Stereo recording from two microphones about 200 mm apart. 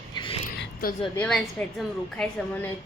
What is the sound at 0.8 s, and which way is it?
Speech, 45° left (ahead or behind).